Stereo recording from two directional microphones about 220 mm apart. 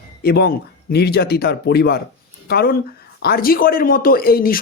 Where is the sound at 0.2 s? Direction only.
45° left (ahead or behind).